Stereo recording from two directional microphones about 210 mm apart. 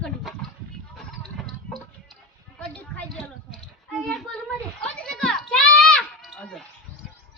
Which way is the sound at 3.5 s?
Centre (ahead or behind).